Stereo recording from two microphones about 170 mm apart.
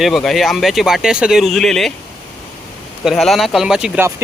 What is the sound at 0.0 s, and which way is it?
Speech, centre (ahead or behind).